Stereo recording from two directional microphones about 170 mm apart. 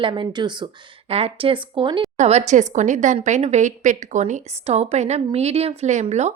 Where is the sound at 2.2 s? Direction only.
40° right (ahead or behind).